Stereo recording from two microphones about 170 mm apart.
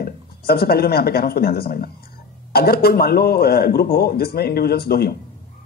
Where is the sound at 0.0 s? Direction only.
65° left (ahead or behind).